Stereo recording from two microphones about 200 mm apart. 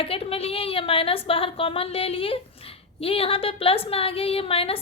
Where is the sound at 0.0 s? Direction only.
30° left (ahead or behind).